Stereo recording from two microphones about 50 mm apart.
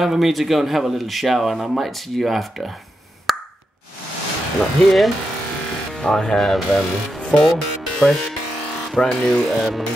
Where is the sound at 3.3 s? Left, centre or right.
Centre.